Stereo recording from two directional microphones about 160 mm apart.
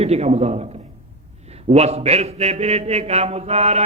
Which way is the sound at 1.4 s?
40° right (ahead or behind).